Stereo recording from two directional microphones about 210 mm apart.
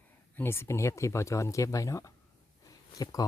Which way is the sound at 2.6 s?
15° left (ahead or behind).